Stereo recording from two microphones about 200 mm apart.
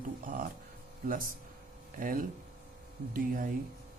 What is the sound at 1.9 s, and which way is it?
Speech, 45° right (ahead or behind).